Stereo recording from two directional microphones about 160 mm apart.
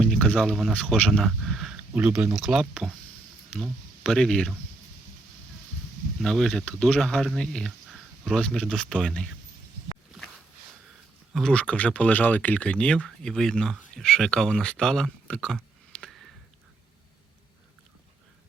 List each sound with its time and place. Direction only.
0.0 s speech: 5° left (ahead or behind)
6.2 s speech: 5° left (ahead or behind)
11.3 s speech: 5° left (ahead or behind)